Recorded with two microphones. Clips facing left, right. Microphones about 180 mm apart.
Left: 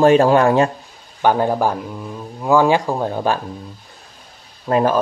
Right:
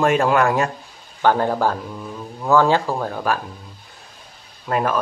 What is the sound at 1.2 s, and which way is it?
Speech, 15° left (ahead or behind).